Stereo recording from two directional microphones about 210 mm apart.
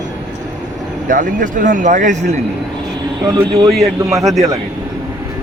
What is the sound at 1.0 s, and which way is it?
Speech, 40° right (ahead or behind).